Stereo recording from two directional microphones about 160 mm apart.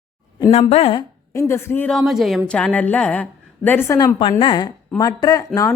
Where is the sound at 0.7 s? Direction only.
40° left (ahead or behind).